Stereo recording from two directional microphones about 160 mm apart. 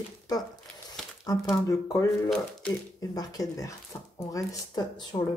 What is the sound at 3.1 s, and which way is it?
Speech, 20° left (ahead or behind).